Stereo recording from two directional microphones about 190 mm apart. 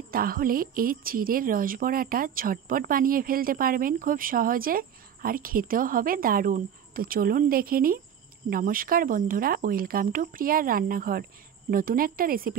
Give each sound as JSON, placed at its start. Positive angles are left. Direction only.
{"t": 0.1, "sound": "a woman's voice", "side_deg": -50}